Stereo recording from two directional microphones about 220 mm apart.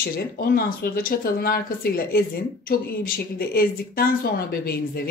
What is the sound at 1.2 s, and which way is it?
Speech, 45° left (ahead or behind).